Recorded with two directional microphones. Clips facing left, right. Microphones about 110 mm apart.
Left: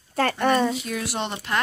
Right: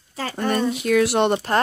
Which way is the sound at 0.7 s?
70° right (ahead or behind).